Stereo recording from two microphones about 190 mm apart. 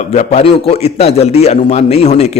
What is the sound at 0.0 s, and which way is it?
A man's voice, 35° left (ahead or behind).